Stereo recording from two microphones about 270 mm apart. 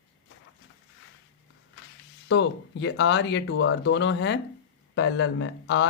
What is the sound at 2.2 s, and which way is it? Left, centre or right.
Speech, left.